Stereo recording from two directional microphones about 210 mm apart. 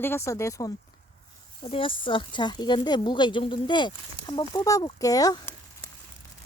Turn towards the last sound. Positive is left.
turn(degrees=15)  # may be behind; listen again after turning